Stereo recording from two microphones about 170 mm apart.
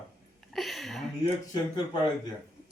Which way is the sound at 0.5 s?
Centre (ahead or behind).